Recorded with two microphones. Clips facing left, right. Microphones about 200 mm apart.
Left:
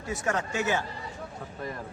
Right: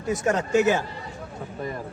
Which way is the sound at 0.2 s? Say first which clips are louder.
Right 8 dB; 20° right (ahead or behind).